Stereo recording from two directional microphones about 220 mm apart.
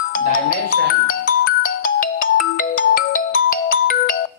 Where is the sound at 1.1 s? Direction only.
40° left (ahead or behind).